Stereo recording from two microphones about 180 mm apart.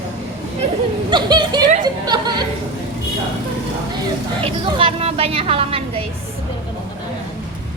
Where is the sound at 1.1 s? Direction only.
25° right (ahead or behind).